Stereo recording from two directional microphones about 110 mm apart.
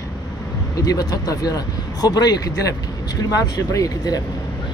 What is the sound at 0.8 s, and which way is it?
Speech, 35° left (ahead or behind).